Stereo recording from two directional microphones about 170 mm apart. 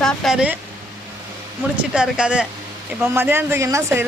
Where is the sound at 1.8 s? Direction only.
5° right (ahead or behind).